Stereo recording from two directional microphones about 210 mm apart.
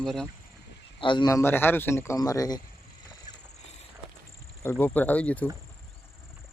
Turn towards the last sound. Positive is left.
turn(degrees=5)  # may be behind; listen again after turning